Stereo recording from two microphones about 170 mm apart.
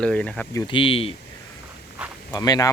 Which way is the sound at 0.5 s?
30° left (ahead or behind).